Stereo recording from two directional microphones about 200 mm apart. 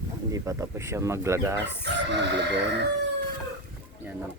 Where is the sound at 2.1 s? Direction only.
60° right (ahead or behind).